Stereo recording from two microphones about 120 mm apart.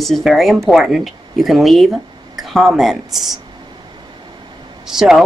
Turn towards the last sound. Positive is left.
turn(degrees=-5)  # may be behind; listen again after turning